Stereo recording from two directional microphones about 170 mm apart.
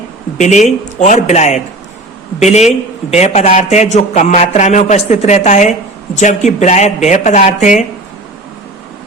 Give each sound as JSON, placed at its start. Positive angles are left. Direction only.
{"t": 0.3, "sound": "speech", "side_deg": 45}